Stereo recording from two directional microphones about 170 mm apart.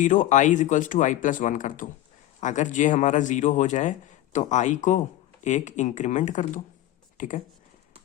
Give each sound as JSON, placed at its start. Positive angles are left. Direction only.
{"t": 0.0, "sound": "a man's voice", "side_deg": 45}